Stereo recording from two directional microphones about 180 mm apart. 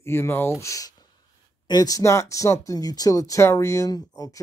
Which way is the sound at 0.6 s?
20° left (ahead or behind).